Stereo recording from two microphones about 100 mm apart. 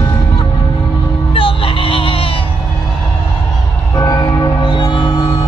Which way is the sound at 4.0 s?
35° left (ahead or behind).